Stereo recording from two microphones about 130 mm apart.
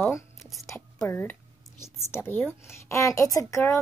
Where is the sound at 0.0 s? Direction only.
20° left (ahead or behind).